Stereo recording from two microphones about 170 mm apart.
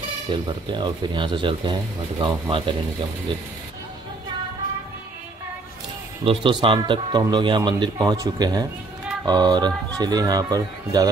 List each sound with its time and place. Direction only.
0.3 s speech: 25° right (ahead or behind)
6.2 s speech: 30° right (ahead or behind)